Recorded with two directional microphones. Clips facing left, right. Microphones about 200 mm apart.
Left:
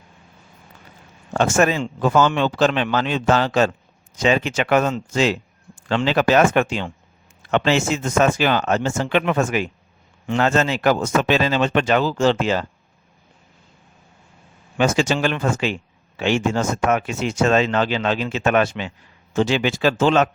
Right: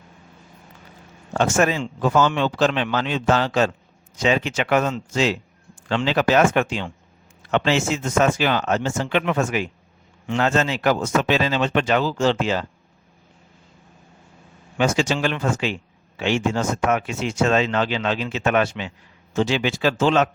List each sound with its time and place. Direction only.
1.4 s speech: 50° left (ahead or behind)
14.8 s speech: 50° left (ahead or behind)